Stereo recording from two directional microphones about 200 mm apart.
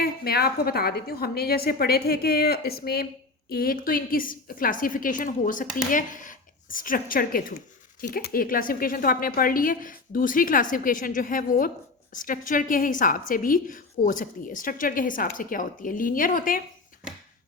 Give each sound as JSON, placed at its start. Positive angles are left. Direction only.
{"t": 0.0, "sound": "a woman's voice", "side_deg": 50}